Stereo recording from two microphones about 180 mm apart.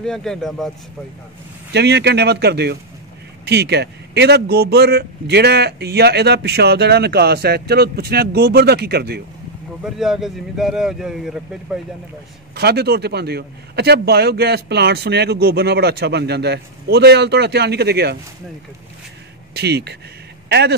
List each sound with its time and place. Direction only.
0.0 s a man's voice: 5° left (ahead or behind)
1.7 s a man's voice: 70° right (ahead or behind)
9.8 s a man's voice: centre (ahead or behind)
12.5 s a man's voice: 65° right (ahead or behind)
19.5 s speech: 65° right (ahead or behind)